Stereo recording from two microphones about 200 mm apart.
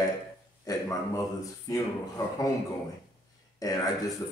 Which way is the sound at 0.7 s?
15° left (ahead or behind).